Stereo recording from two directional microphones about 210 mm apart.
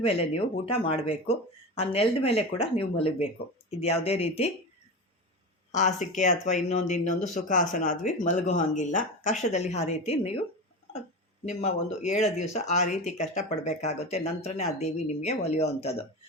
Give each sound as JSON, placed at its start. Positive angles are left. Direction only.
{"t": 0.0, "sound": "speech", "side_deg": 25}
{"t": 5.7, "sound": "speech", "side_deg": 35}
{"t": 11.4, "sound": "speech", "side_deg": 30}